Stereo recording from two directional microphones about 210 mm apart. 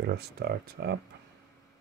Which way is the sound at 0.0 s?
50° right (ahead or behind).